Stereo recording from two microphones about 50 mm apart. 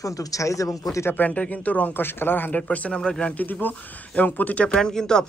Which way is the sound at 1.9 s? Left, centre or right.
Left.